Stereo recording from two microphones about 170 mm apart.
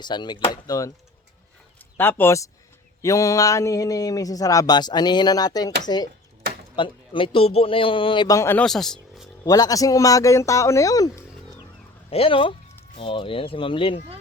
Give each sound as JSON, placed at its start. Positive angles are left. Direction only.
{"t": 0.0, "sound": "speech", "side_deg": 25}
{"t": 2.0, "sound": "speech", "side_deg": 10}
{"t": 8.6, "sound": "speech", "side_deg": 0}
{"t": 9.4, "sound": "speech", "side_deg": 20}
{"t": 12.1, "sound": "speech", "side_deg": 35}